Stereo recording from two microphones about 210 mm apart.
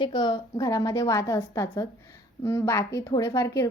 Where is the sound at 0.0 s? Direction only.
20° left (ahead or behind).